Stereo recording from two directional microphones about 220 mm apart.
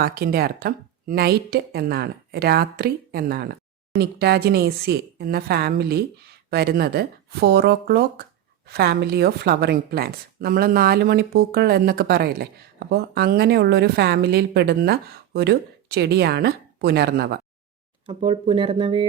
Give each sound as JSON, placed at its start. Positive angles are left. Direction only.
{"t": 0.0, "sound": "a woman's voice", "side_deg": -45}
{"t": 18.0, "sound": "speech", "side_deg": -25}